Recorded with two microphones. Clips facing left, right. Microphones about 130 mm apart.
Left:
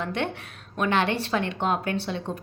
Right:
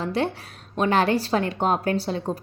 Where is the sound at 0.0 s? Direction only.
35° right (ahead or behind).